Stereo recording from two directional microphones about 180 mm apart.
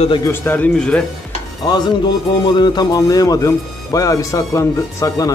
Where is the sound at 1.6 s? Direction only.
25° left (ahead or behind).